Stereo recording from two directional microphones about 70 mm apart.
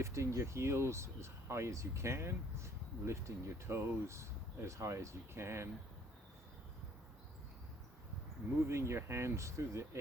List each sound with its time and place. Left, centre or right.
0.0 s speech: right
8.7 s speech: right